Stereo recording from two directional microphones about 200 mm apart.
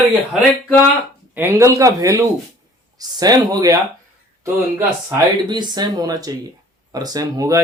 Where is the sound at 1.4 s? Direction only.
15° right (ahead or behind).